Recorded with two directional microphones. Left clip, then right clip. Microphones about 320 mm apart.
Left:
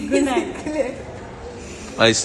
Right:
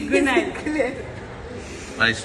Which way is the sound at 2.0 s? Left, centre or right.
Centre.